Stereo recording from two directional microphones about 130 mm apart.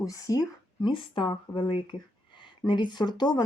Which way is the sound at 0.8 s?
40° left (ahead or behind).